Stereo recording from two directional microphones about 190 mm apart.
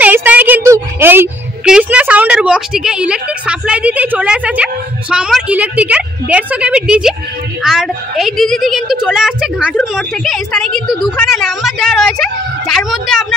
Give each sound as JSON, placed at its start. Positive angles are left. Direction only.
{"t": 0.0, "sound": "a woman's voice", "side_deg": -10}